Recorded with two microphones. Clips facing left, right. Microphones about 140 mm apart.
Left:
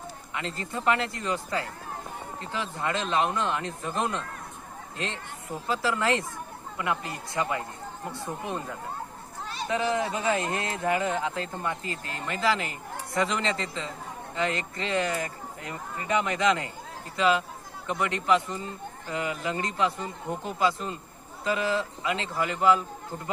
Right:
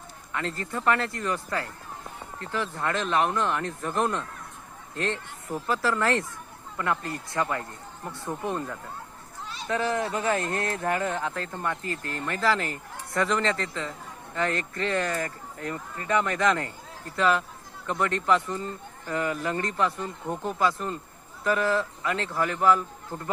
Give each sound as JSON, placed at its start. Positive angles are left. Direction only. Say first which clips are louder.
{"t": 0.3, "sound": "speech", "louder": "right 2 dB", "side_deg": 20}
{"t": 9.6, "sound": "speech", "louder": "even", "side_deg": 20}